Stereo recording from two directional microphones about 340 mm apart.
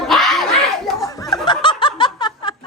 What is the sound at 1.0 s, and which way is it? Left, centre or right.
Snicker, centre.